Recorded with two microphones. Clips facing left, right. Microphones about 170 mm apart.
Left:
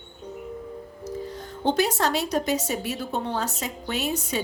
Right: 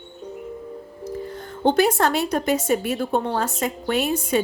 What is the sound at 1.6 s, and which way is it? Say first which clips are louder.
A woman's voice: right 5 dB; 55° right (ahead or behind).